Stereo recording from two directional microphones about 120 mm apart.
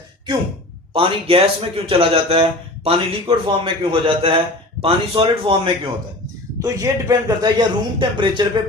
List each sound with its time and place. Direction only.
0.9 s speech: 50° right (ahead or behind)
6.6 s a man's voice: 25° right (ahead or behind); by 8.6 s 40° right (ahead or behind)